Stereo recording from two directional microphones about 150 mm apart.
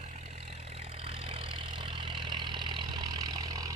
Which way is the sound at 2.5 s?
30° right (ahead or behind).